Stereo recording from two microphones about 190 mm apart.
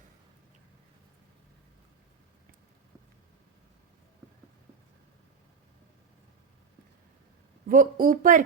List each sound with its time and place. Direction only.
7.7 s speech: 45° right (ahead or behind)